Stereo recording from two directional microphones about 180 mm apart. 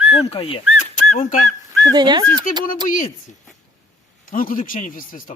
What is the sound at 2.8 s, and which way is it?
A man's voice, 45° left (ahead or behind).